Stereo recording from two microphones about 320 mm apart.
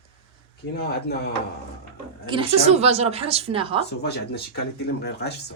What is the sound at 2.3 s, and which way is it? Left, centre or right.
A woman's voice, centre.